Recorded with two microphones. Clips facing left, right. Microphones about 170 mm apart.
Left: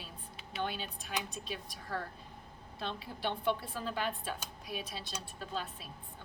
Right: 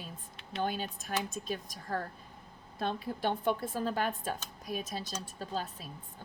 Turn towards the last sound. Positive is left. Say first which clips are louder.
# right 3 dB
turn(degrees=-40)  # may be behind; listen again after turning